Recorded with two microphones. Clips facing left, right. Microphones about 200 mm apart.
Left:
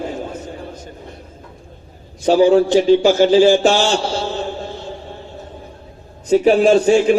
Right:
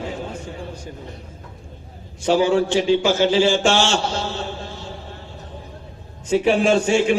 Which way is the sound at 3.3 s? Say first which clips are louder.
Left 6 dB; 40° left (ahead or behind).